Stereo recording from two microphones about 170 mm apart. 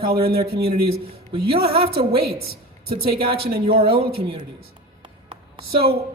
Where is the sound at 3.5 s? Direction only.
60° right (ahead or behind).